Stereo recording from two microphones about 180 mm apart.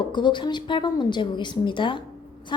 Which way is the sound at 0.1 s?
25° left (ahead or behind).